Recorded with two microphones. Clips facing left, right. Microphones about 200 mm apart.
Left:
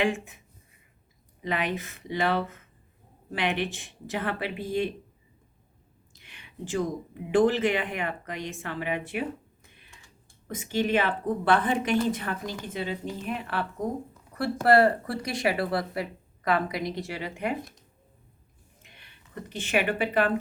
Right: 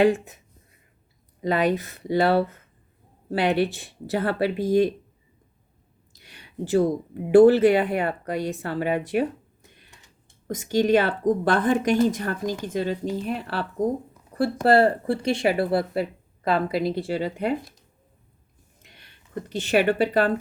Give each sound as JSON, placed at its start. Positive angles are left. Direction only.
{"t": 0.0, "sound": "speech", "side_deg": -40}
{"t": 1.4, "sound": "speech", "side_deg": -35}
{"t": 6.1, "sound": "speech", "side_deg": -40}
{"t": 9.9, "sound": "typing", "side_deg": -20}
{"t": 10.4, "sound": "speech", "side_deg": -40}
{"t": 19.5, "sound": "speech", "side_deg": -40}